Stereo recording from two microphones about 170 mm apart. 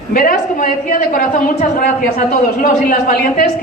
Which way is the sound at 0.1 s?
55° left (ahead or behind).